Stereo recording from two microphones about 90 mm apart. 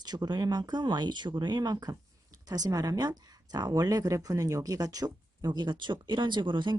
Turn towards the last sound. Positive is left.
turn(degrees=-60)  # may be behind; listen again after turning